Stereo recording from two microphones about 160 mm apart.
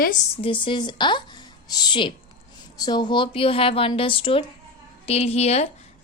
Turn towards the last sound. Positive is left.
turn(degrees=40)  # may be behind; listen again after turning